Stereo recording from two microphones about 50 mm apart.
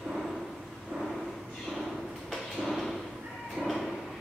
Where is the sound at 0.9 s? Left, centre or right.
Centre.